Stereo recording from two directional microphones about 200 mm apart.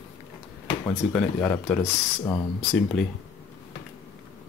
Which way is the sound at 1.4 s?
10° left (ahead or behind).